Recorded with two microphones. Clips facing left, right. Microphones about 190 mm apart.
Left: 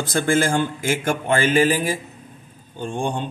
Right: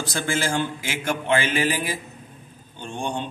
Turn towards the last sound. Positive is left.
turn(degrees=50)  # may be behind; listen again after turning